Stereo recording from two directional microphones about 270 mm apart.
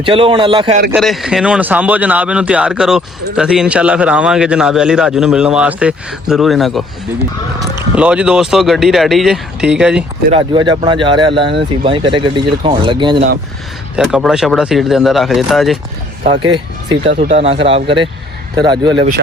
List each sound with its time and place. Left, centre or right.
0.0 s speech: centre
0.9 s a man's voice: centre
7.9 s a man's voice: centre
10.3 s speech: centre
13.9 s a man's voice: centre
16.2 s speech: centre